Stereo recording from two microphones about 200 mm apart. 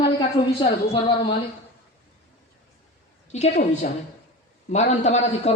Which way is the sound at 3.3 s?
35° left (ahead or behind).